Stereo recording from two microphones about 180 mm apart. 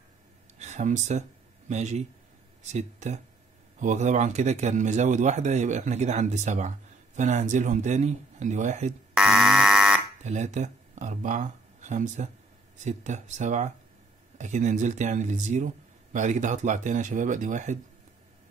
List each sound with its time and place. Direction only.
0.6 s a man's voice: 40° right (ahead or behind)
9.1 s alarm: 5° right (ahead or behind)
10.2 s a man's voice: 40° right (ahead or behind)